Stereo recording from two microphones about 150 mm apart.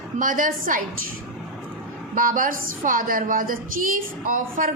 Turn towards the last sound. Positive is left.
turn(degrees=-65)  # may be behind; listen again after turning